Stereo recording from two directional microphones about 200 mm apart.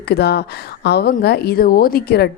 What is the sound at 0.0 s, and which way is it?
A woman's voice, 55° left (ahead or behind).